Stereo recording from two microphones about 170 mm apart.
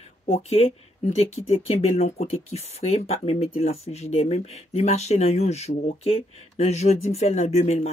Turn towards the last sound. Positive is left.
turn(degrees=40)  # may be behind; listen again after turning